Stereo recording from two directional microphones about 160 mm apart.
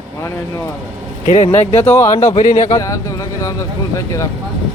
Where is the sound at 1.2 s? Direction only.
45° left (ahead or behind).